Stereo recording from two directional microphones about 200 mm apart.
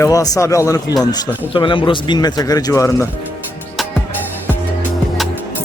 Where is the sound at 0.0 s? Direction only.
15° left (ahead or behind).